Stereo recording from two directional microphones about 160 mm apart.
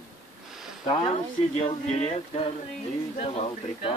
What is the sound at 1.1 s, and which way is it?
Speech, 40° left (ahead or behind).